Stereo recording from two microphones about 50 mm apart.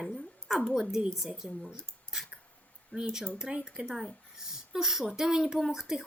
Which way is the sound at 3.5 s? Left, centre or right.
Centre.